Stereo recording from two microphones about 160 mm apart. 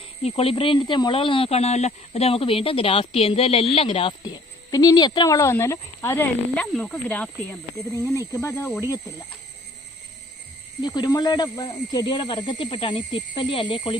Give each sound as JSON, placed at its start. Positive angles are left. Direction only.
{"t": 0.2, "sound": "speech", "side_deg": 40}
{"t": 10.8, "sound": "speech", "side_deg": 25}